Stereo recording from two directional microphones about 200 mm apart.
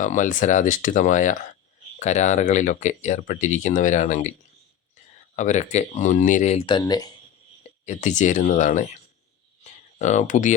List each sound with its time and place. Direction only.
0.0 s speech: 40° left (ahead or behind)
5.4 s speech: 35° left (ahead or behind); by 7.1 s 20° left (ahead or behind)
7.9 s speech: 35° left (ahead or behind)
9.6 s a sound: 35° left (ahead or behind)